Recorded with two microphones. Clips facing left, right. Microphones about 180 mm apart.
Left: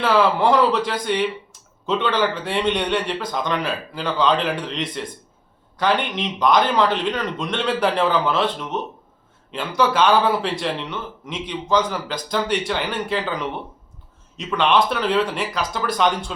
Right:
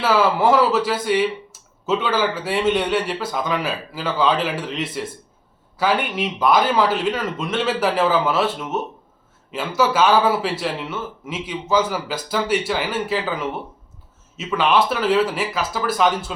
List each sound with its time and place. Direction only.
0.0 s a man's voice: 5° right (ahead or behind)